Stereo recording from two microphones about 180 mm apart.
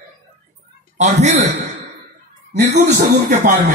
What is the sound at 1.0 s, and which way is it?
Speech, 40° right (ahead or behind).